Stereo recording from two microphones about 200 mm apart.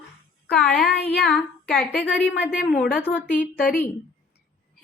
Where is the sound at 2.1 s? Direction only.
5° right (ahead or behind).